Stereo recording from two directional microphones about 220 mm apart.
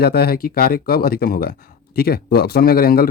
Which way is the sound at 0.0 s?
45° left (ahead or behind).